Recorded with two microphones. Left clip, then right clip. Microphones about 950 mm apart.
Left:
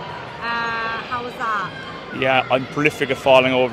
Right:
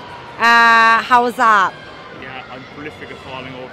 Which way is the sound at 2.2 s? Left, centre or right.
Left.